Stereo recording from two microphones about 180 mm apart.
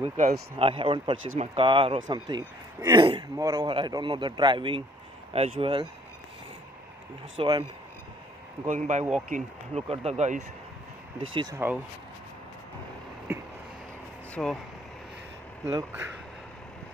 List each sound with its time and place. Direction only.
0.6 s a man's voice: 30° right (ahead or behind)
7.3 s a man's voice: 25° right (ahead or behind)
8.6 s speech: 45° right (ahead or behind)
11.3 s speech: 20° right (ahead or behind)
13.3 s a sound: 15° right (ahead or behind)
14.3 s speech: 5° left (ahead or behind)